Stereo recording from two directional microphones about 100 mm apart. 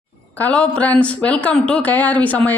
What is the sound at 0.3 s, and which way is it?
Speech, 15° left (ahead or behind).